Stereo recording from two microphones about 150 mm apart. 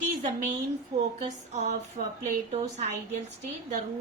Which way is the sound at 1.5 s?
55° right (ahead or behind).